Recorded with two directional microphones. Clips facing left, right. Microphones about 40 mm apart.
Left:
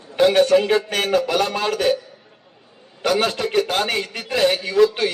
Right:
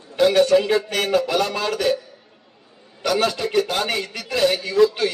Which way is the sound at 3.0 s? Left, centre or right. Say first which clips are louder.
Left 1 dB; left.